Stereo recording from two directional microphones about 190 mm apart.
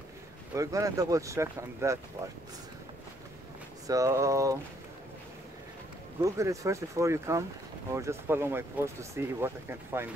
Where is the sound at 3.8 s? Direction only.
15° right (ahead or behind).